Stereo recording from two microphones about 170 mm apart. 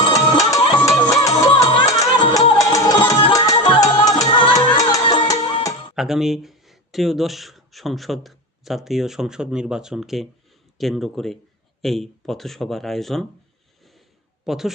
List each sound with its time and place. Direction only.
0.0 s music: 20° left (ahead or behind)
6.0 s speech: centre (ahead or behind)
14.4 s speech: centre (ahead or behind)